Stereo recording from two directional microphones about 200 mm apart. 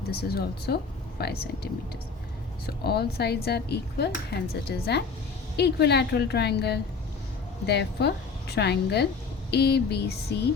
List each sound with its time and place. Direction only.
0.1 s a woman's voice: 50° left (ahead or behind)